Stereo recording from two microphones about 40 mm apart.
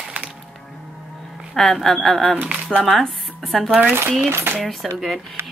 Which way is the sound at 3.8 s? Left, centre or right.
Right.